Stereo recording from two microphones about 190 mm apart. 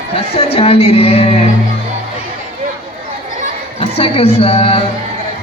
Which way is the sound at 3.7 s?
30° left (ahead or behind).